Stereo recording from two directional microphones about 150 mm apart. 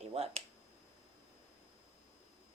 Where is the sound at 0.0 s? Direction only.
45° right (ahead or behind).